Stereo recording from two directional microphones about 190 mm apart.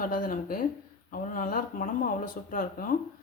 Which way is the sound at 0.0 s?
45° left (ahead or behind).